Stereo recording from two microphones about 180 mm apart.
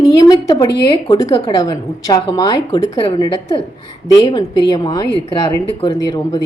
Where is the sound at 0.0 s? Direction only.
20° left (ahead or behind).